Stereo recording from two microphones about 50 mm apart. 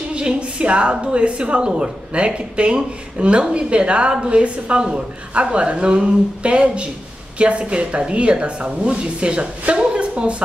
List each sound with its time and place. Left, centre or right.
0.1 s speech: right